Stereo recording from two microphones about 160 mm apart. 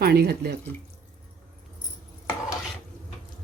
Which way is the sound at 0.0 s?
80° right.